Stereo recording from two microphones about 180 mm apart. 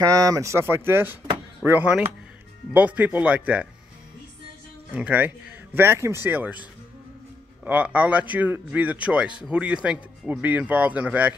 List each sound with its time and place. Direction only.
0.0 s speech: 20° right (ahead or behind)
4.9 s speech: 10° right (ahead or behind)
7.6 s a man's voice: 10° right (ahead or behind)